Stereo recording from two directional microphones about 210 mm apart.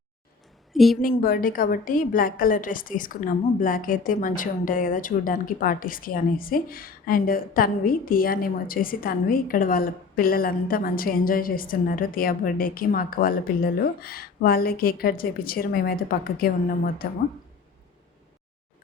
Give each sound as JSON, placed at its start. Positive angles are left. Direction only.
{"t": 0.7, "sound": "a woman's voice", "side_deg": 0}
{"t": 1.0, "sound": "a woman's voice", "side_deg": 45}